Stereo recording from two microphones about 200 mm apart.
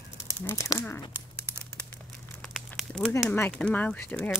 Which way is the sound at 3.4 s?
5° left (ahead or behind).